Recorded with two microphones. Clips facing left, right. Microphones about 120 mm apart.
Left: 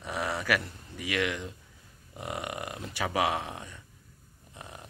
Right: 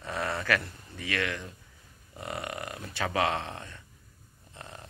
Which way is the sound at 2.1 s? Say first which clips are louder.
Left 1 dB; 15° left (ahead or behind).